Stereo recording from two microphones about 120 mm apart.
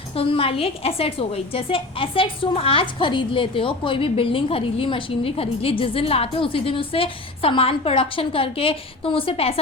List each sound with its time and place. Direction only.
0.2 s a woman's voice: 50° left (ahead or behind)